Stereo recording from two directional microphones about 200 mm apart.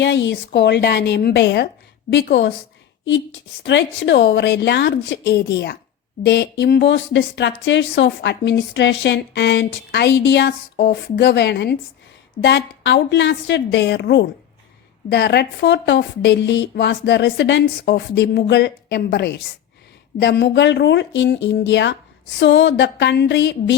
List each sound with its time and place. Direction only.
0.0 s speech: 65° left (ahead or behind)
3.6 s speech: 60° left (ahead or behind)